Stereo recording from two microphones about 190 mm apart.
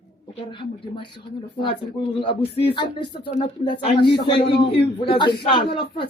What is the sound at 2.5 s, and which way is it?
A woman's voice, 30° left (ahead or behind).